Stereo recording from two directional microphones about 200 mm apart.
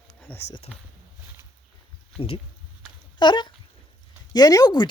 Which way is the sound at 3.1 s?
25° left (ahead or behind).